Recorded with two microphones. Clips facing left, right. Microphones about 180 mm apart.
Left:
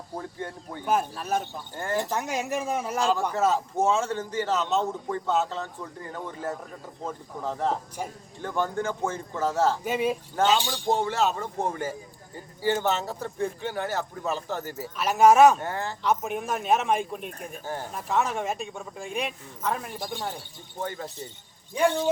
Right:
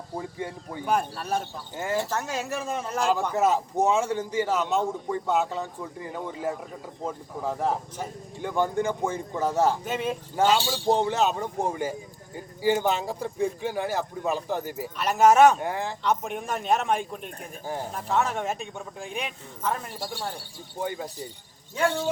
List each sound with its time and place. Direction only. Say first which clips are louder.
0.2 s a man's voice: right 2 dB; 10° right (ahead or behind)
0.9 s speech: even; 5° left (ahead or behind)
1.7 s a man's voice: right 1 dB; 10° right (ahead or behind)
2.0 s a woman's voice: left 3 dB; 15° left (ahead or behind)
3.0 s a man's voice: right 2 dB; 15° right (ahead or behind)
9.8 s a woman's voice: left 3 dB; 10° left (ahead or behind)
10.3 s a man's voice: right 3 dB; 10° right (ahead or behind)
14.9 s speech: left 1 dB; centre (ahead or behind)
15.6 s a man's voice: right 2 dB; 15° right (ahead or behind)
16.0 s speech: left 2 dB; 5° left (ahead or behind)
20.0 s speech: left 1 dB; 20° left (ahead or behind)
20.8 s a man's voice: right 2 dB; 15° right (ahead or behind)
21.8 s a woman's voice: left 2 dB; 15° left (ahead or behind)